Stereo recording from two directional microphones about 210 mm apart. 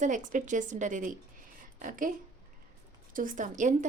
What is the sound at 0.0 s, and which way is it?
Speech, 35° right (ahead or behind).